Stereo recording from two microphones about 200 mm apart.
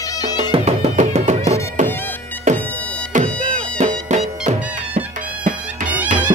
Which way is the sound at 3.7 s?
35° right (ahead or behind).